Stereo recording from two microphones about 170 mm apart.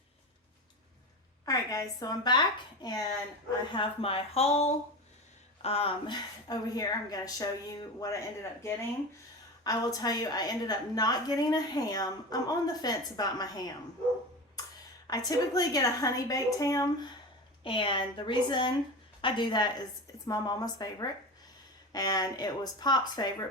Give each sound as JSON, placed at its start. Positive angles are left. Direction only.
{"t": 1.5, "sound": "a woman's voice", "side_deg": 20}
{"t": 3.8, "sound": "a woman's voice", "side_deg": 35}
{"t": 15.0, "sound": "a woman's voice", "side_deg": 20}